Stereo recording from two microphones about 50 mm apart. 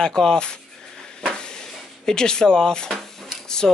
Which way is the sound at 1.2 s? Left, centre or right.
Centre.